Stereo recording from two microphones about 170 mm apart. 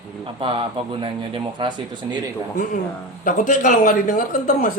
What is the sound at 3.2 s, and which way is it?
Speech, 50° left (ahead or behind).